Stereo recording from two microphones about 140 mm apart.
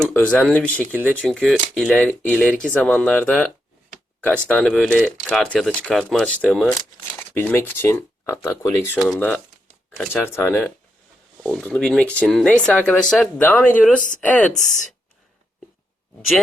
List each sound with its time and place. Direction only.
0.0 s speech: 10° left (ahead or behind)
1.3 s speech: centre (ahead or behind)